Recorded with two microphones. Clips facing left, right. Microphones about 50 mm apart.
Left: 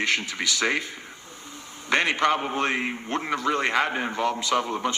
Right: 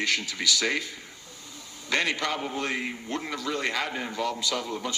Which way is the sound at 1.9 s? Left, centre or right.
Left.